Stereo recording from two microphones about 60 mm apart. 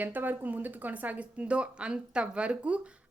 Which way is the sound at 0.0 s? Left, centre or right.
Right.